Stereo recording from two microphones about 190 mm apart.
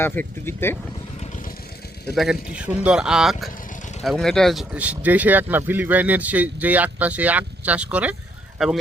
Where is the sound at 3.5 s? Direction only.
45° left (ahead or behind).